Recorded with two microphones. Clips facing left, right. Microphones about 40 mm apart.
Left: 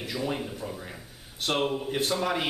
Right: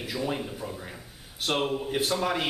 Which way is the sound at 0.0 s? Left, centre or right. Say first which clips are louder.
Even; centre.